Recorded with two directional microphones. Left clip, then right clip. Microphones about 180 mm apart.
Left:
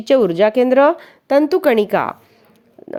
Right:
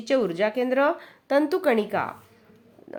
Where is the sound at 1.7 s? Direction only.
50° left (ahead or behind).